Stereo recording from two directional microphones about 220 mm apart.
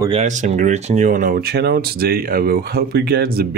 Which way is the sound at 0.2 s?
35° right (ahead or behind).